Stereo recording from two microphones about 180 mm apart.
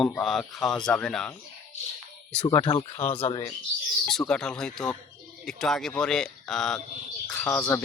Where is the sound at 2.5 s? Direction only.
25° left (ahead or behind).